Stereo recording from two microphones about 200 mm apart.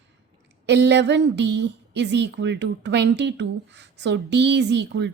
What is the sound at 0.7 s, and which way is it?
A woman's voice, 60° right (ahead or behind).